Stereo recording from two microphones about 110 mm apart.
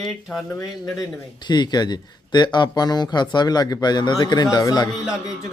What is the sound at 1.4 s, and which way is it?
Speech, 40° left (ahead or behind).